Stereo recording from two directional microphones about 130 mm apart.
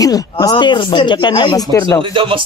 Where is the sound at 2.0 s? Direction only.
40° right (ahead or behind).